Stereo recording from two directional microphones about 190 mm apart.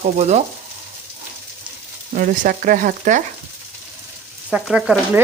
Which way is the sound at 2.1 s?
45° right (ahead or behind).